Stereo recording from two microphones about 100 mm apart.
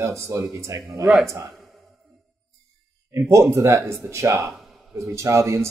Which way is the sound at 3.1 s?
30° right (ahead or behind).